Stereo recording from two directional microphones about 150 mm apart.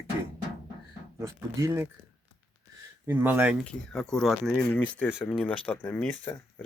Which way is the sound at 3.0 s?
15° right (ahead or behind).